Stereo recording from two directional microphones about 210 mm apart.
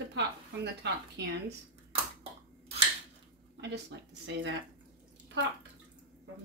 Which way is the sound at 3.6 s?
55° right (ahead or behind).